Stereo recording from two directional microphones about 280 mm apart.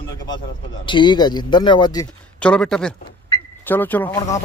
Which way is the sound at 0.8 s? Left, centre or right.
Centre.